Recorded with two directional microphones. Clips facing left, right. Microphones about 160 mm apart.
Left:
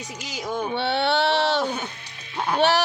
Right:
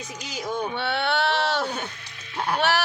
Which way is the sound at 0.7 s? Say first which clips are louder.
Left 7 dB; 30° left (ahead or behind).